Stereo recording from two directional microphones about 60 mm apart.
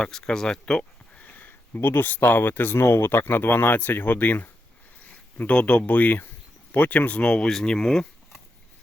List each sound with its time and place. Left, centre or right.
0.0 s speech: centre; by 4.4 s left
5.4 s speech: left